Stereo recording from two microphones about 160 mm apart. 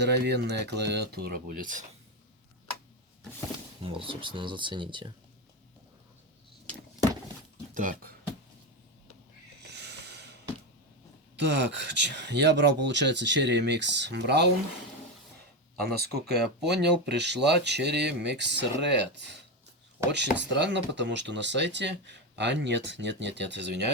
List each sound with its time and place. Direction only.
0.0 s speech: 90° right; by 1.8 s 60° right (ahead or behind)
3.8 s speech: 35° right (ahead or behind)
7.7 s speech: 55° right (ahead or behind)
9.6 s a sound: 90° right
11.3 s speech: 90° right
15.8 s speech: 85° right